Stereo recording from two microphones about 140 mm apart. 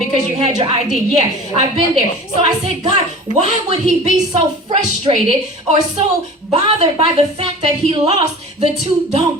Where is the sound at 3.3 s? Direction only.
50° right (ahead or behind).